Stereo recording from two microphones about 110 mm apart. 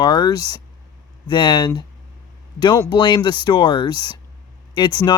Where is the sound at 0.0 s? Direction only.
40° left (ahead or behind).